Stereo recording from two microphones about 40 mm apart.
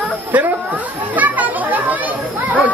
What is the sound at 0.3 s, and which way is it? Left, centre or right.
Speech, right.